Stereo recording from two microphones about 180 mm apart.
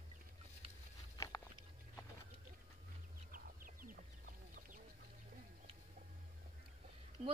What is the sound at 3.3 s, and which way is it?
Chicken, 50° right (ahead or behind).